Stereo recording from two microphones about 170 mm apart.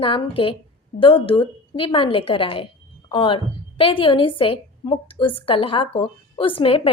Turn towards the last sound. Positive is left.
turn(degrees=35)  # may be behind; listen again after turning